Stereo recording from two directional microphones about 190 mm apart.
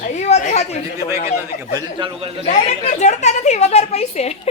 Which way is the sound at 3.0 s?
40° left (ahead or behind).